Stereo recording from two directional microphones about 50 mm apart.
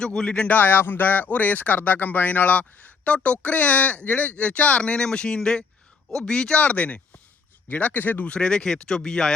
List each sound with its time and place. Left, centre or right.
0.0 s speech: centre
0.4 s speech: left; by 6.6 s centre
6.6 s speech: left
8.3 s speech: centre